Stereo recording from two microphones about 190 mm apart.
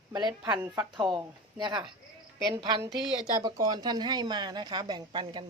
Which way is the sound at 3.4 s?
20° right (ahead or behind).